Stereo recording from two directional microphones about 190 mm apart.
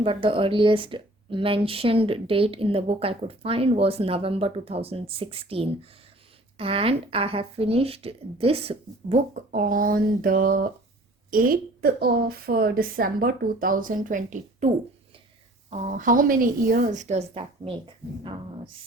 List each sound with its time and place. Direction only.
0.0 s a woman's voice: 30° right (ahead or behind)
15.7 s a woman's voice: 40° right (ahead or behind)